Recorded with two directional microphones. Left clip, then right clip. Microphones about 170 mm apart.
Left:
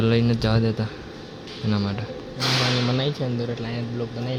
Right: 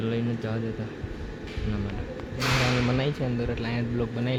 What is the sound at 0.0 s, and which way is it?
Speech, 30° left (ahead or behind).